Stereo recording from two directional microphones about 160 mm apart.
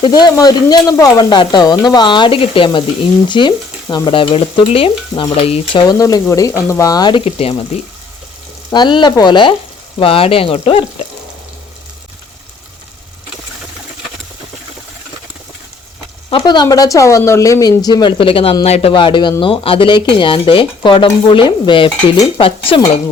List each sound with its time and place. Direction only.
0.0 s speech: 25° left (ahead or behind)
3.2 s stir: 30° left (ahead or behind)
5.8 s speech: 25° left (ahead or behind)
7.3 s stir: 40° left (ahead or behind)
8.7 s speech: 30° left (ahead or behind)
10.0 s stir: 35° left (ahead or behind)
16.3 s speech: 25° left (ahead or behind)
19.4 s stir: 35° left (ahead or behind)